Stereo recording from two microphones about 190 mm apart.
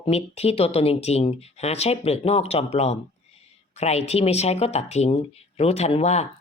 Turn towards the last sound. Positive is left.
turn(degrees=35)  # may be behind; listen again after turning